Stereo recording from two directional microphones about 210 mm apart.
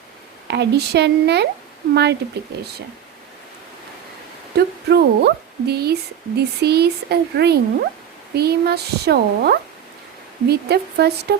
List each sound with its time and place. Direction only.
0.4 s speech: 55° right (ahead or behind)
4.5 s speech: 50° right (ahead or behind)